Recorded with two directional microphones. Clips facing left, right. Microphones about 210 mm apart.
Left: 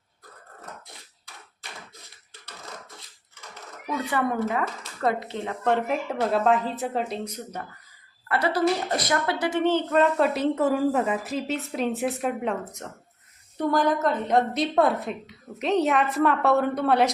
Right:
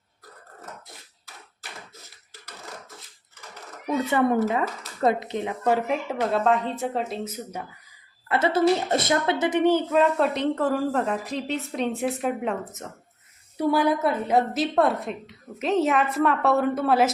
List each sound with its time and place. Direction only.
3.8 s speech: 25° right (ahead or behind)
5.6 s a woman's voice: 5° right (ahead or behind)
8.3 s a woman's voice: 25° right (ahead or behind); by 17.1 s centre (ahead or behind)